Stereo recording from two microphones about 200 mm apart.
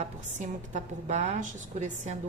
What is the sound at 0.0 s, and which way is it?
A woman's voice, 35° right (ahead or behind).